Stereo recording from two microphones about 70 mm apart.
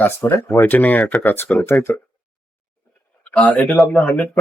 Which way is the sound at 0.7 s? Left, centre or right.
Left.